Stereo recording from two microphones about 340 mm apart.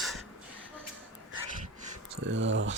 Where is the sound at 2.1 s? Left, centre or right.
Right.